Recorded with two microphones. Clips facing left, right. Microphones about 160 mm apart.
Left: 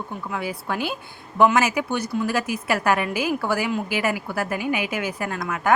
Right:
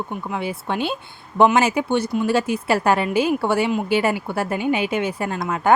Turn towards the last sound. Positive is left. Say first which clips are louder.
# right 3 dB
turn(degrees=-30)  # may be behind; listen again after turning